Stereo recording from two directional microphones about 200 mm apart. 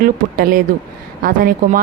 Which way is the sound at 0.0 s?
45° right (ahead or behind).